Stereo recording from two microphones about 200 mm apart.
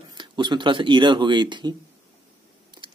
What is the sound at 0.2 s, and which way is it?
Speech, 25° right (ahead or behind).